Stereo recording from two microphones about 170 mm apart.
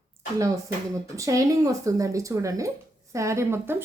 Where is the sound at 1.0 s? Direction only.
20° right (ahead or behind).